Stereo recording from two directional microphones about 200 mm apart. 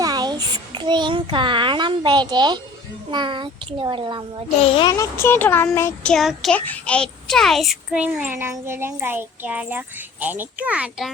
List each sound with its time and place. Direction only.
0.0 s child singing: 20° right (ahead or behind)
3.1 s a child's voice: 25° right (ahead or behind)
4.6 s child singing: 25° left (ahead or behind); by 11.1 s 5° right (ahead or behind)